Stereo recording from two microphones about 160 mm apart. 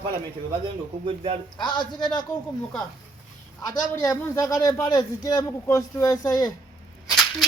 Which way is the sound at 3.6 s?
25° left (ahead or behind).